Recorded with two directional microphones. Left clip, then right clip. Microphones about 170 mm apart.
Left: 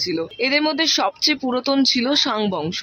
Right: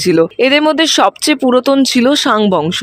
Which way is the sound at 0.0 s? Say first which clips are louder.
Right 12 dB; 45° right (ahead or behind).